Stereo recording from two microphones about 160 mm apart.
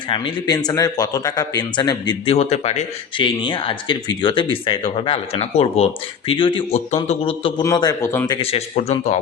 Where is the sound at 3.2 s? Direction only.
30° left (ahead or behind).